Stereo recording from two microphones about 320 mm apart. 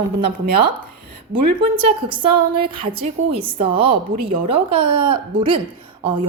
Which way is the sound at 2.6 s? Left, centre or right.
Centre.